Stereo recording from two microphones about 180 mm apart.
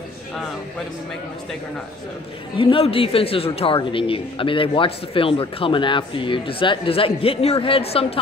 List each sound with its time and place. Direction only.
2.5 s a woman's voice: 30° left (ahead or behind)